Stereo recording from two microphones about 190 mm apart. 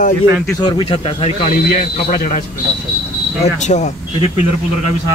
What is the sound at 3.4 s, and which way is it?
Speech, 35° left (ahead or behind).